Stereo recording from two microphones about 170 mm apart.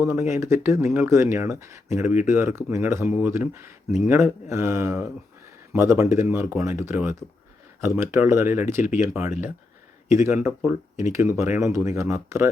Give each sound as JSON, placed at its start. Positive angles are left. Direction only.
{"t": 0.0, "sound": "speech", "side_deg": -15}